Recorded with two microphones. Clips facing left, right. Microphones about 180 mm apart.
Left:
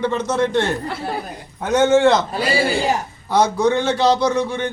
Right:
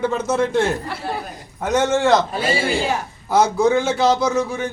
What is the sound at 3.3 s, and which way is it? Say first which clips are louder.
Speech: right 1 dB; 5° right (ahead or behind).